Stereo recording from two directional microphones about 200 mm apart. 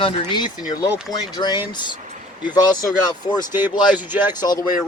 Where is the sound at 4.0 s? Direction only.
10° right (ahead or behind).